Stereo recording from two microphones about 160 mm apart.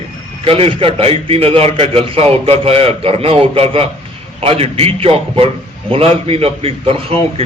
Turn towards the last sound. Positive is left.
turn(degrees=-35)  # may be behind; listen again after turning